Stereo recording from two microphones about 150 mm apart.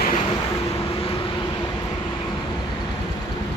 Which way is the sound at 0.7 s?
40° left (ahead or behind).